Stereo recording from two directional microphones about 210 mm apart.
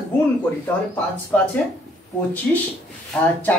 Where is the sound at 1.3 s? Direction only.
5° left (ahead or behind).